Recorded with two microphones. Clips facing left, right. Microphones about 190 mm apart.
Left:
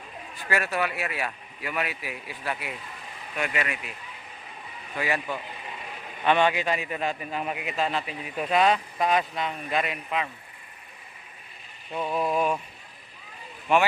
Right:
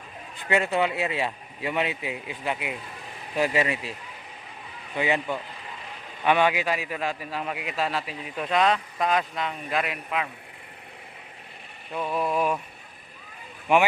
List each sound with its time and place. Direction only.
0.3 s speech: 20° right (ahead or behind)
3.3 s speech: 30° right (ahead or behind)
4.9 s speech: 20° right (ahead or behind); by 10.2 s centre (ahead or behind)
11.9 s speech: centre (ahead or behind)
13.7 s speech: 15° right (ahead or behind)